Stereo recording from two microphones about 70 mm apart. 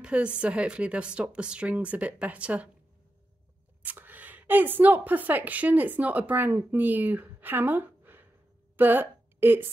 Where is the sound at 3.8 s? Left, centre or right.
Right.